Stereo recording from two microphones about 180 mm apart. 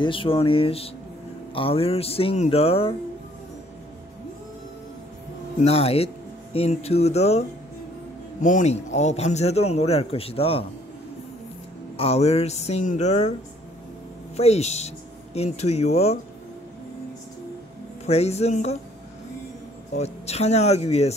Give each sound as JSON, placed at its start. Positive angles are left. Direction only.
{"t": 0.0, "sound": "a man's voice", "side_deg": 30}
{"t": 5.6, "sound": "a man's voice", "side_deg": 35}
{"t": 12.0, "sound": "a man's voice", "side_deg": 35}
{"t": 14.3, "sound": "a man's voice", "side_deg": 35}
{"t": 18.0, "sound": "a man's voice", "side_deg": 35}
{"t": 20.0, "sound": "a man's voice", "side_deg": 35}